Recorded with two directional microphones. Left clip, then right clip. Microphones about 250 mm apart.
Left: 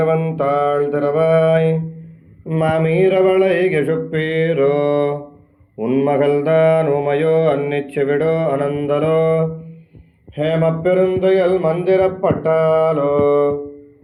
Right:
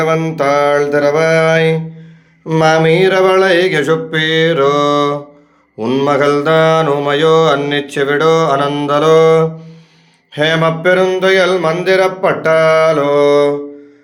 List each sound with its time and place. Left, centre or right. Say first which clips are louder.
0.3 s mantra: right 5 dB; right